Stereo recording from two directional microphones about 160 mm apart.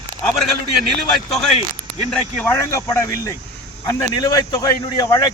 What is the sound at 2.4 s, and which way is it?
Speech, 15° left (ahead or behind).